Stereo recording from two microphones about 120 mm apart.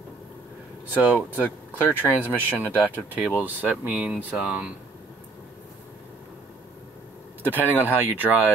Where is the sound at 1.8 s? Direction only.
15° right (ahead or behind).